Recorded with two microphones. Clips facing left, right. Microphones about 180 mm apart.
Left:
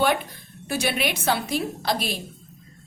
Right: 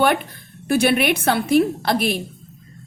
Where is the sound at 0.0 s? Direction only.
60° right (ahead or behind).